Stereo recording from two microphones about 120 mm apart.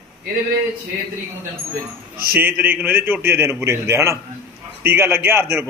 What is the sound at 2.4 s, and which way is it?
A man's voice, 15° right (ahead or behind).